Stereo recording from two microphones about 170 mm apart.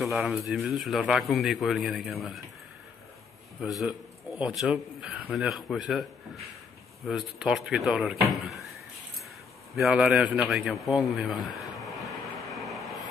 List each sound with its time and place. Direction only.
0.0 s a man's voice: centre (ahead or behind)
3.6 s a man's voice: 5° right (ahead or behind)
7.1 s a man's voice: 5° right (ahead or behind)
9.8 s a man's voice: centre (ahead or behind)
12.0 s vehicle: centre (ahead or behind)